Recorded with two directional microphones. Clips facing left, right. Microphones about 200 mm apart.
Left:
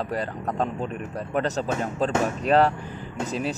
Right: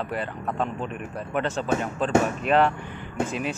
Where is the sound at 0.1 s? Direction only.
40° left (ahead or behind).